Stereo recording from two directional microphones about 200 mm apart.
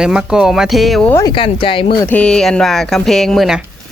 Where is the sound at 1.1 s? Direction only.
20° left (ahead or behind).